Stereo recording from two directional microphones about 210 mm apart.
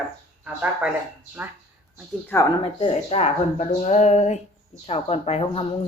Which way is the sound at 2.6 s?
25° left (ahead or behind).